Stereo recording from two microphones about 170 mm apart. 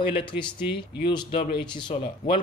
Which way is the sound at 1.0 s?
30° left (ahead or behind).